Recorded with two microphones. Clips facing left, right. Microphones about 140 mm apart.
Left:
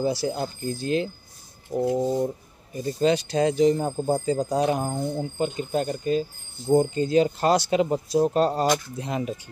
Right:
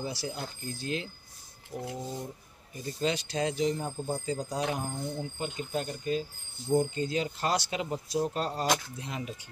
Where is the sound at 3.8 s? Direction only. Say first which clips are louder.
Left 9 dB; 65° left (ahead or behind).